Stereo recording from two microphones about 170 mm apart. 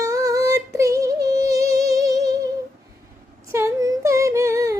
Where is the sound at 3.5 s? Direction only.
15° right (ahead or behind).